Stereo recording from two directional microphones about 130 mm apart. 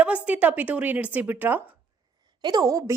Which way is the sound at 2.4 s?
30° right (ahead or behind).